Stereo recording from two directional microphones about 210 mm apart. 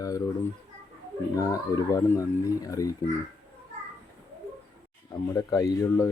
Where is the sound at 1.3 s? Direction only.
15° left (ahead or behind).